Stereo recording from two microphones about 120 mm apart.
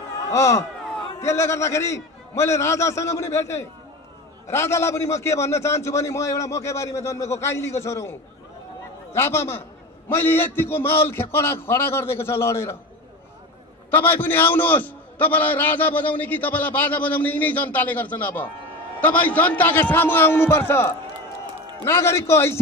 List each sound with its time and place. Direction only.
0.3 s a man's voice: 25° left (ahead or behind)
13.8 s a man's voice: 15° left (ahead or behind)